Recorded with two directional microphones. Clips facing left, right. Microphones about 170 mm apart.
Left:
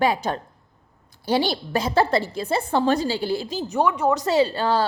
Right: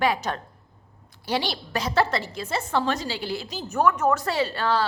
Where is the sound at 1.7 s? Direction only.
30° left (ahead or behind).